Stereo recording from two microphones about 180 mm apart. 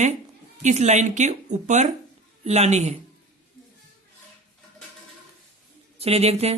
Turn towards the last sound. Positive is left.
turn(degrees=-35)  # may be behind; listen again after turning